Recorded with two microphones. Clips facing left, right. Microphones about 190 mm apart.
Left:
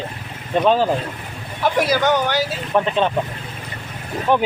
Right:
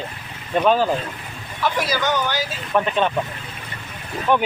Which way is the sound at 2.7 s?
25° left (ahead or behind).